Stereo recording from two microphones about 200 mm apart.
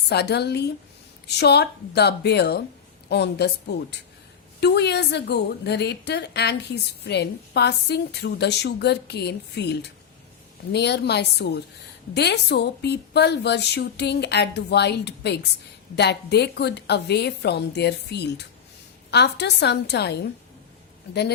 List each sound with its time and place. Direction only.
0.1 s a woman's voice: 55° left (ahead or behind)